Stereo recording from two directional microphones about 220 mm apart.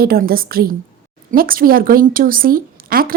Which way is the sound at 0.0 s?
45° right (ahead or behind).